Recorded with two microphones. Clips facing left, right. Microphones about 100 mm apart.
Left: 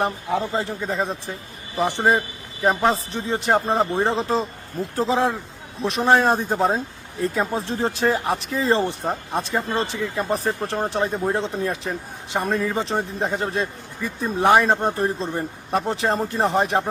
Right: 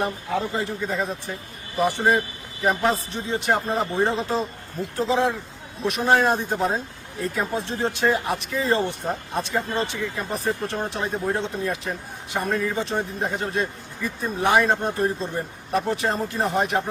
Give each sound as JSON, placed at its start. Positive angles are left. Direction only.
{"t": 0.0, "sound": "a man's voice", "side_deg": 30}